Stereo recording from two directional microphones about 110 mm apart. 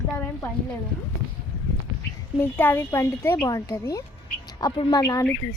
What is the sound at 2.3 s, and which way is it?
Speech, 20° left (ahead or behind).